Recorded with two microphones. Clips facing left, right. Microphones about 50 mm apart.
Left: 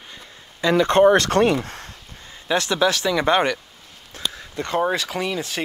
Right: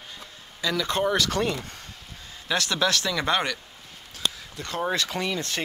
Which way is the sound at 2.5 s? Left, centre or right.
Centre.